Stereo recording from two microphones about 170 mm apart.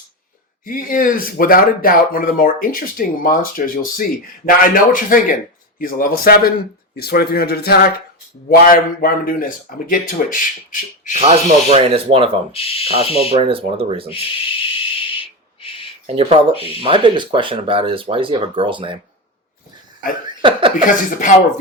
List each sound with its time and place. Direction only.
0.6 s a man's voice: 55° left (ahead or behind)
11.1 s speech: 40° right (ahead or behind)
12.5 s speech: 35° left (ahead or behind)
13.3 s speech: 35° right (ahead or behind)
14.1 s whistle: 30° left (ahead or behind)
16.0 s speech: 35° right (ahead or behind)
20.4 s a sound: 30° right (ahead or behind)
20.7 s a man's voice: 50° left (ahead or behind)